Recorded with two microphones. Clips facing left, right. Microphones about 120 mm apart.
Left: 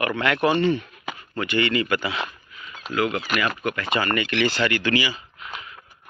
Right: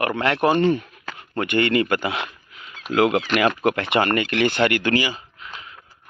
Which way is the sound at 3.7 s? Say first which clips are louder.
Right 5 dB; 65° right (ahead or behind).